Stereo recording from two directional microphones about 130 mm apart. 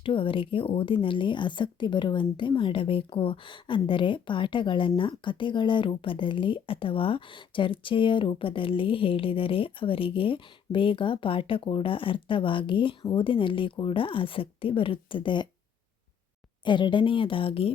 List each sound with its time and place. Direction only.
0.0 s speech: 40° left (ahead or behind)
16.6 s speech: 35° left (ahead or behind)